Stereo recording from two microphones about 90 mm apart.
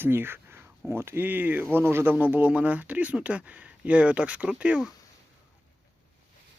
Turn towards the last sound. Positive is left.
turn(degrees=-10)  # may be behind; listen again after turning